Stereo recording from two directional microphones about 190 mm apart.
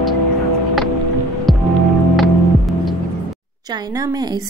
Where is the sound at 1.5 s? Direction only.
Centre (ahead or behind).